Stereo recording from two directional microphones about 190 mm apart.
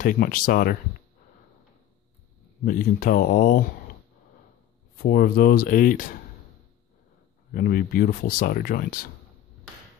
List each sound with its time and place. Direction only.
0.0 s speech: 45° left (ahead or behind)
2.6 s speech: 45° left (ahead or behind)
4.9 s speech: 50° left (ahead or behind)
7.5 s speech: 50° left (ahead or behind)